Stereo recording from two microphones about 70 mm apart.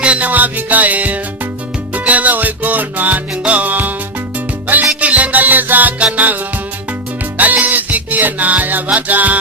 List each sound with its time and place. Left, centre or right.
0.0 s music: centre
4.9 s music: right
7.3 s music: right